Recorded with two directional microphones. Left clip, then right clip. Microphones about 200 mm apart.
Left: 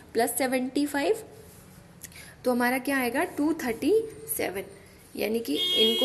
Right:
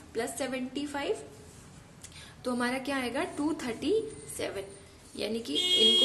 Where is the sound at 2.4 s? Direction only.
20° left (ahead or behind).